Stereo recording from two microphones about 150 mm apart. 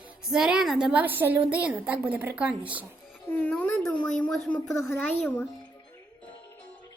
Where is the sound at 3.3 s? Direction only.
10° left (ahead or behind).